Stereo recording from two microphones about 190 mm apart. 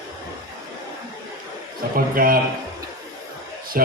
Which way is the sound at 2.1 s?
50° right (ahead or behind).